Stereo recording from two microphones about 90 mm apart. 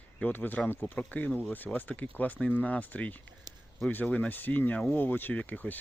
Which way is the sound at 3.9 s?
15° left (ahead or behind).